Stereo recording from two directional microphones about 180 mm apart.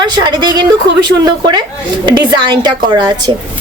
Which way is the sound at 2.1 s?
25° right (ahead or behind).